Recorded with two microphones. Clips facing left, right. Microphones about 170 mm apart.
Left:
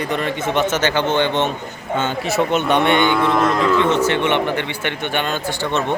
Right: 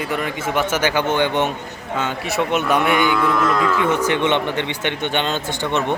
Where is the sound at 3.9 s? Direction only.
15° right (ahead or behind).